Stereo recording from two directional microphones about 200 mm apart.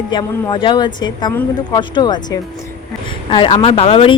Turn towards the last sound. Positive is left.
turn(degrees=30)  # may be behind; listen again after turning